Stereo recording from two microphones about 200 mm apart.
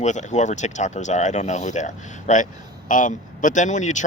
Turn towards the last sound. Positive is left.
turn(degrees=35)  # may be behind; listen again after turning